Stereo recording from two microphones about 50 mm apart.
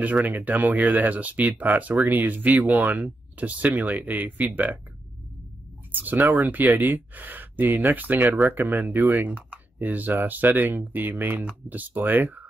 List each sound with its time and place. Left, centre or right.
0.0 s speech: right
5.9 s speech: right